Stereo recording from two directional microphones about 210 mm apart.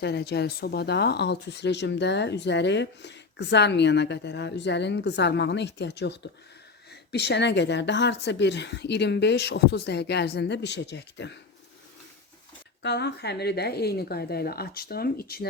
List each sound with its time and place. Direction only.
0.0 s speech: 50° left (ahead or behind)
12.8 s a woman's voice: 55° left (ahead or behind)